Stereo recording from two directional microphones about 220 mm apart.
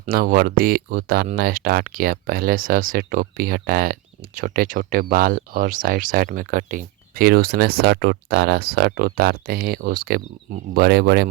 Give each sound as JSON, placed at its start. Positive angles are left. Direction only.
{"t": 0.0, "sound": "speech", "side_deg": -40}